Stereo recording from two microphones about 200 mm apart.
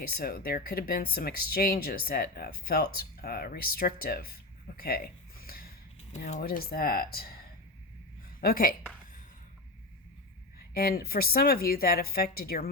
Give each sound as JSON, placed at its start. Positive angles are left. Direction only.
{"t": 0.0, "sound": "speech", "side_deg": 50}
{"t": 4.8, "sound": "a sound", "side_deg": 50}
{"t": 6.1, "sound": "speech", "side_deg": 35}
{"t": 8.4, "sound": "speech", "side_deg": 45}
{"t": 10.8, "sound": "speech", "side_deg": 50}